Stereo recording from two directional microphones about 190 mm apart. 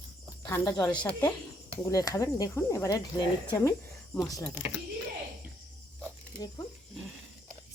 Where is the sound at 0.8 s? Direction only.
5° left (ahead or behind).